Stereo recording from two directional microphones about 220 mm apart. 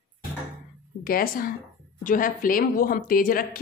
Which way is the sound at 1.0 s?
40° left (ahead or behind).